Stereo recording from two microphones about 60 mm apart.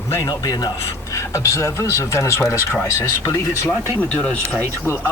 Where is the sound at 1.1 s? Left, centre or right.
Left.